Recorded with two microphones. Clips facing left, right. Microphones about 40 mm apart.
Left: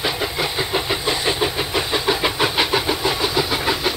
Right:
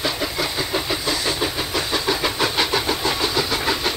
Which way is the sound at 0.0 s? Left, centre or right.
Centre.